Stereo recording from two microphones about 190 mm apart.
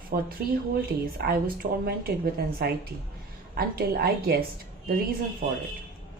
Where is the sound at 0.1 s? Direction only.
50° right (ahead or behind).